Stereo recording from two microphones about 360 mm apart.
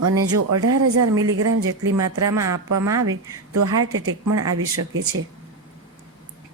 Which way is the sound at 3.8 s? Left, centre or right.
Right.